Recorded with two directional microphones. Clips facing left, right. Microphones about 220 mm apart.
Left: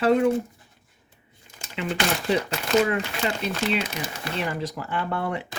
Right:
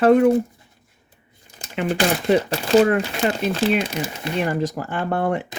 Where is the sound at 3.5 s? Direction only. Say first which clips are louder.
Right 6 dB; 30° right (ahead or behind).